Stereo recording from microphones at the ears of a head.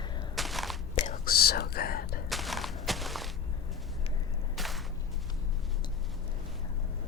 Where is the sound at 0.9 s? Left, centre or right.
Left.